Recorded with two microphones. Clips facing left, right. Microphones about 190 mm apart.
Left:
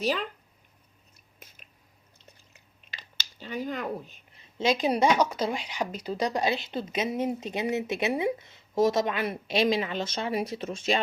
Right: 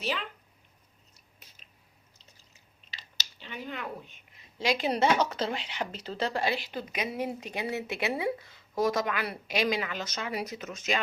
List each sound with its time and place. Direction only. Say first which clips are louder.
0.0 s speech: left 5 dB; 40° left (ahead or behind)
1.4 s a sound: left 7 dB; 50° left (ahead or behind)
2.1 s chewing: left 8 dB; 55° left (ahead or behind); by 4.4 s 40° left (ahead or behind)
4.5 s speech: left 3 dB; 20° left (ahead or behind)